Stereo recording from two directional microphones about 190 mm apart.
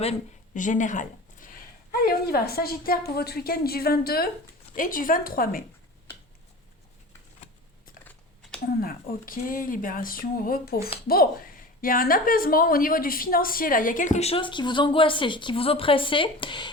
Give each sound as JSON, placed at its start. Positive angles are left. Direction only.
{"t": 0.0, "sound": "speech", "side_deg": 40}
{"t": 1.9, "sound": "a woman's voice", "side_deg": 55}
{"t": 8.0, "sound": "typing", "side_deg": 5}
{"t": 8.6, "sound": "a woman's voice", "side_deg": 50}